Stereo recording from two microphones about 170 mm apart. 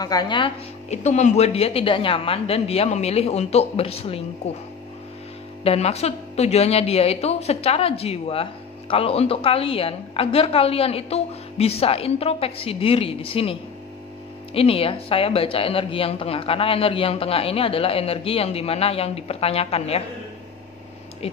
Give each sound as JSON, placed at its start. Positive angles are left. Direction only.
{"t": 0.0, "sound": "a woman's voice", "side_deg": 25}
{"t": 0.8, "sound": "a woman's voice", "side_deg": 40}
{"t": 5.6, "sound": "a woman's voice", "side_deg": 35}